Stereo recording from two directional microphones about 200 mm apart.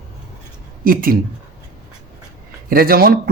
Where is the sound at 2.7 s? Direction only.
45° right (ahead or behind).